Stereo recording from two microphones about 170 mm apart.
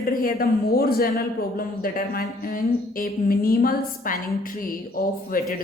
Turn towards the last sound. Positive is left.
turn(degrees=60)  # may be behind; listen again after turning